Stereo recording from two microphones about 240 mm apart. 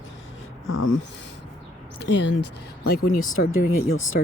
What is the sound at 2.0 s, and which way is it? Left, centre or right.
Speech, left.